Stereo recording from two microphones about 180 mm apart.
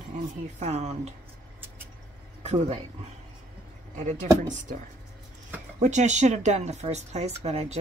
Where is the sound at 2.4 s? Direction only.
35° right (ahead or behind).